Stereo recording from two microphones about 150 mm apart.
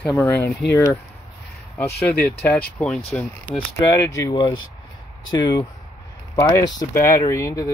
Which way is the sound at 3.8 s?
20° left (ahead or behind).